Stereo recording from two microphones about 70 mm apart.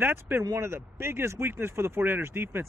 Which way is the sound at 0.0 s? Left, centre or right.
Right.